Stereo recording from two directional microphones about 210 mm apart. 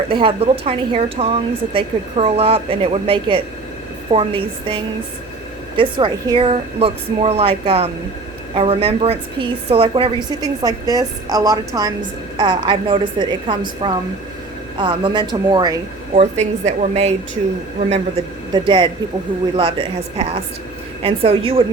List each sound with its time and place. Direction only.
0.1 s a woman's voice: 25° right (ahead or behind)
16.1 s a woman's voice: 35° right (ahead or behind)
21.0 s a woman's voice: 25° right (ahead or behind)